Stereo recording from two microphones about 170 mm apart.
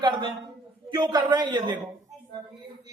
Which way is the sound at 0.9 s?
25° right (ahead or behind).